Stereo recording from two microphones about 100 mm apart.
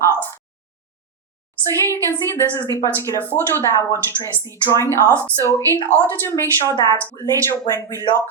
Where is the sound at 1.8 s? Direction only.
25° left (ahead or behind).